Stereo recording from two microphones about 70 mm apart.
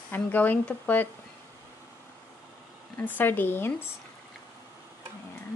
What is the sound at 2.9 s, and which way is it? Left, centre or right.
Speech, left.